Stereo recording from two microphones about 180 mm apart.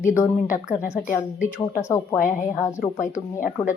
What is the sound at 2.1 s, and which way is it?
Speech, 15° left (ahead or behind).